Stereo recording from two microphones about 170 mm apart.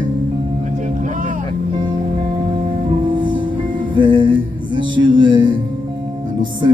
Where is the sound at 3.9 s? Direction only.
30° right (ahead or behind).